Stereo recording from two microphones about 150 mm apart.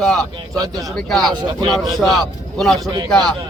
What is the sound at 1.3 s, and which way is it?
Speech, 30° right (ahead or behind).